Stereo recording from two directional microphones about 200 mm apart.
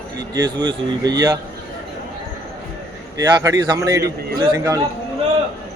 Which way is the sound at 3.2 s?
15° right (ahead or behind).